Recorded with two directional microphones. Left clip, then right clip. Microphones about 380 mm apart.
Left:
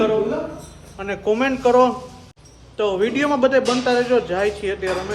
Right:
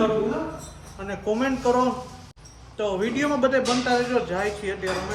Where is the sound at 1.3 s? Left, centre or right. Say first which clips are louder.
Left 7 dB; centre.